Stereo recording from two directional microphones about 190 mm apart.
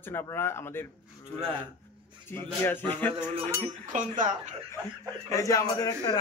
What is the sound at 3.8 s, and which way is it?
Speech, 45° right (ahead or behind).